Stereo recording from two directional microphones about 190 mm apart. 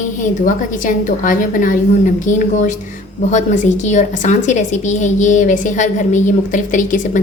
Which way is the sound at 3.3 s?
40° left (ahead or behind).